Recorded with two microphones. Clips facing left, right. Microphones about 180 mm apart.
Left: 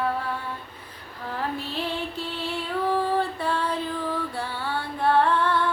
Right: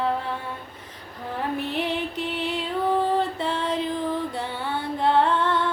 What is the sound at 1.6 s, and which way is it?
Female singing, 15° right (ahead or behind).